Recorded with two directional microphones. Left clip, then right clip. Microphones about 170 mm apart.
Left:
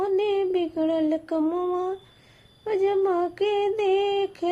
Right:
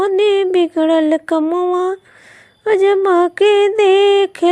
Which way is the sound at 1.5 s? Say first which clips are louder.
Right 10 dB; 25° right (ahead or behind).